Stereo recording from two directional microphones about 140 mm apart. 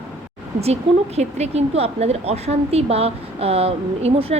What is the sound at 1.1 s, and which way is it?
A woman's voice, 50° right (ahead or behind).